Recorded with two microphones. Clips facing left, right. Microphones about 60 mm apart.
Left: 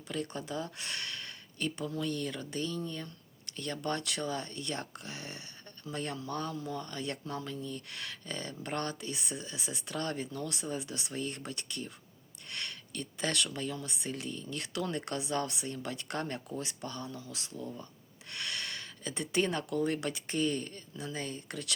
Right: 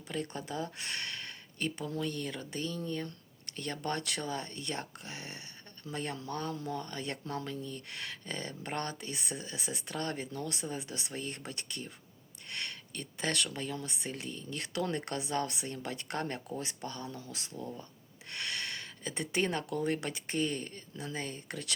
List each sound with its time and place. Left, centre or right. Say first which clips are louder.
0.1 s speech: left 1 dB; right